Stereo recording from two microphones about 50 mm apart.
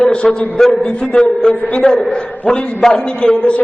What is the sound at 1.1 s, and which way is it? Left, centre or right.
A man's voice, centre.